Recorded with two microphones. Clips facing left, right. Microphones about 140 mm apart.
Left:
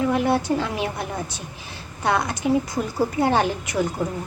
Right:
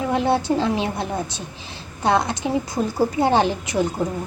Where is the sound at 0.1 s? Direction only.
25° right (ahead or behind).